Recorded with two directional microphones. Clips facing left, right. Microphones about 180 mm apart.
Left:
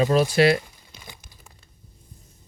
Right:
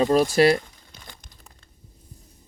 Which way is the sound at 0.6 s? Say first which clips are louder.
Left 1 dB; 10° left (ahead or behind).